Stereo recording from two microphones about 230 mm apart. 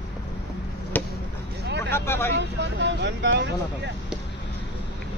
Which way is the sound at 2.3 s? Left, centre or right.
Right.